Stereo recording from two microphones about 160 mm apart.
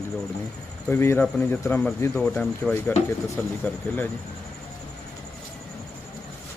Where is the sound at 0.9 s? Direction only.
15° left (ahead or behind).